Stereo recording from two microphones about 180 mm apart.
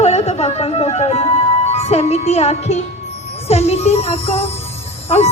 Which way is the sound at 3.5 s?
35° left (ahead or behind).